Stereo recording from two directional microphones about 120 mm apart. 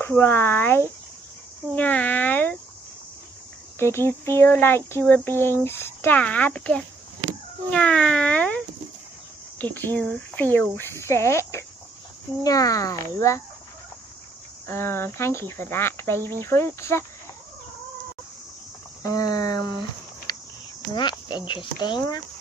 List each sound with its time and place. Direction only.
0.0 s speech: 20° left (ahead or behind)
3.8 s speech: 20° left (ahead or behind)
9.6 s speech: 15° left (ahead or behind)
14.7 s speech: 20° left (ahead or behind)
19.1 s speech: 30° left (ahead or behind)
20.3 s cricket: 30° left (ahead or behind)
20.9 s speech: 40° left (ahead or behind)